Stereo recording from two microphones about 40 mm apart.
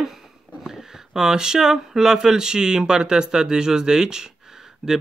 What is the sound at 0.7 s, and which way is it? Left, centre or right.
Speech, centre.